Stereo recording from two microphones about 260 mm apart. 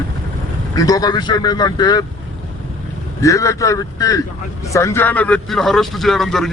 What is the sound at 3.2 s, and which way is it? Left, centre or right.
Speech, centre.